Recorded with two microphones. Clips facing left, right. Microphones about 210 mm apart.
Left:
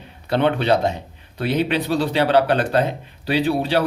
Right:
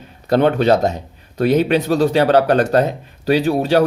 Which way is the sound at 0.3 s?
40° right (ahead or behind).